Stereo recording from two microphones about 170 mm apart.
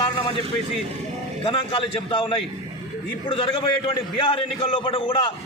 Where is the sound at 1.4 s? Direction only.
30° left (ahead or behind).